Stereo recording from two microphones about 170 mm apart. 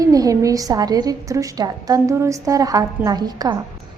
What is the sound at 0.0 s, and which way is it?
A woman's voice, 20° right (ahead or behind).